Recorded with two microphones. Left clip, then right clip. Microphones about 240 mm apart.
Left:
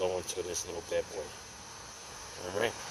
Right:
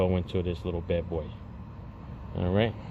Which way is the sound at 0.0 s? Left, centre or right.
Centre.